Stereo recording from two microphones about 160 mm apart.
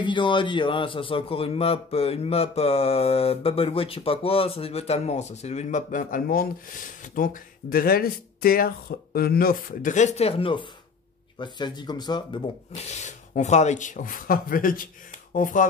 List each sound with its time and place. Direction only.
0.0 s speech: 30° left (ahead or behind); by 6.5 s 65° left (ahead or behind)
7.7 s speech: 70° left (ahead or behind); by 12.4 s 30° left (ahead or behind)
12.7 s speech: 45° left (ahead or behind)